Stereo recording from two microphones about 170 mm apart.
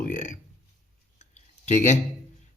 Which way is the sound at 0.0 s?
50° left (ahead or behind).